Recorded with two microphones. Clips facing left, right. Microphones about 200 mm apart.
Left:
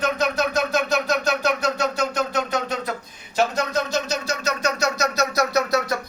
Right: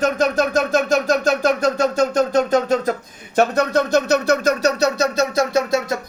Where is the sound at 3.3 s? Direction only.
60° right (ahead or behind).